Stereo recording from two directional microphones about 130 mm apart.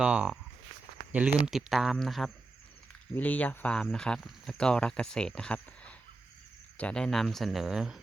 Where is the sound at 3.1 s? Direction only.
10° left (ahead or behind).